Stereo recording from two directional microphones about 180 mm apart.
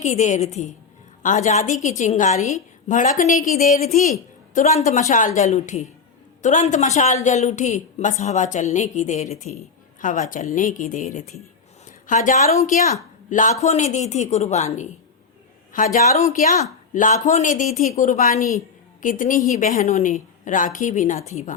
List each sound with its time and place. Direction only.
0.0 s a woman's voice: 40° left (ahead or behind)